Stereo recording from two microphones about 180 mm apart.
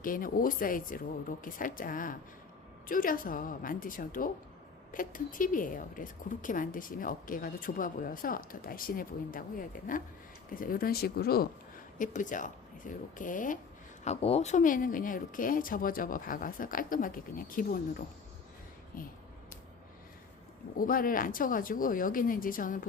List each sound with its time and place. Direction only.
0.0 s speech: 50° left (ahead or behind)
11.9 s speech: 45° left (ahead or behind)
14.0 s speech: 35° left (ahead or behind)
18.9 s speech: 50° left (ahead or behind)
20.7 s speech: 50° left (ahead or behind)